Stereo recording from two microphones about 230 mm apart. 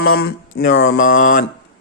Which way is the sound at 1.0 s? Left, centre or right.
Left.